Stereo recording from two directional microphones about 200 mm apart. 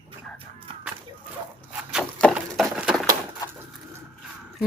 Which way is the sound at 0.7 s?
25° right (ahead or behind).